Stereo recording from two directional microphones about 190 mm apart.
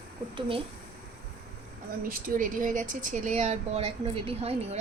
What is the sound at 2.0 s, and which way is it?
Speech, 50° right (ahead or behind).